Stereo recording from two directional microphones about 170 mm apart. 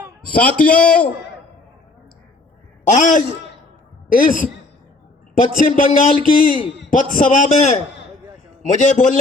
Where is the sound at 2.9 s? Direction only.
50° left (ahead or behind).